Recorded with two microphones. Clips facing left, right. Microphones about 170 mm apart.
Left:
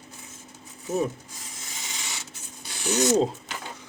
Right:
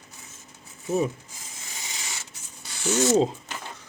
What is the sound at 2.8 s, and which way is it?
Speech, 15° left (ahead or behind).